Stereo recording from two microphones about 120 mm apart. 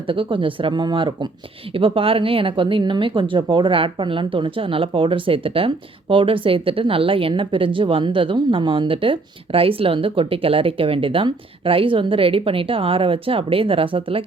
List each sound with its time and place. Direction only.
0.1 s speech: 45° right (ahead or behind)